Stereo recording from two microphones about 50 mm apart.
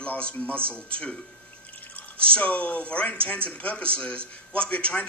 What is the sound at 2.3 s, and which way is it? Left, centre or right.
A man's voice, left.